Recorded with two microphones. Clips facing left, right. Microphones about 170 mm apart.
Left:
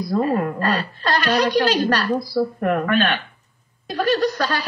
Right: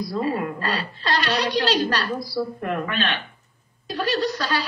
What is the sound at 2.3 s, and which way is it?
Speech, 50° left (ahead or behind).